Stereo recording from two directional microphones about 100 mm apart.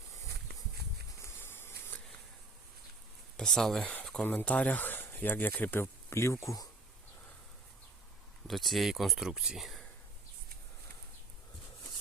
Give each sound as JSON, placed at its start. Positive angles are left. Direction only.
{"t": 1.2, "sound": "a sound", "side_deg": 25}
{"t": 3.3, "sound": "speech", "side_deg": 5}
{"t": 8.4, "sound": "speech", "side_deg": 0}